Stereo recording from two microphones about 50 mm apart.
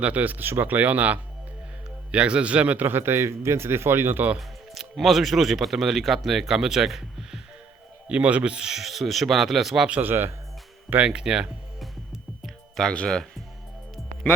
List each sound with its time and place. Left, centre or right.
0.0 s speech: right
2.1 s a man's voice: right
4.4 s speech: centre
8.0 s speech: right
8.5 s speech: centre
10.0 s a man's voice: right
11.0 s speech: centre
11.8 s music: centre